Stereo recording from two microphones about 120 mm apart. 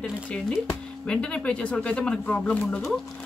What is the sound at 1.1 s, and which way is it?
Speech, 10° left (ahead or behind).